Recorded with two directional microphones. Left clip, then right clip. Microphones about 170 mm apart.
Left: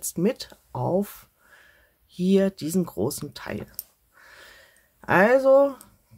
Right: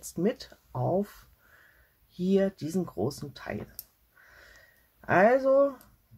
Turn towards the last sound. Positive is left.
turn(degrees=40)  # may be behind; listen again after turning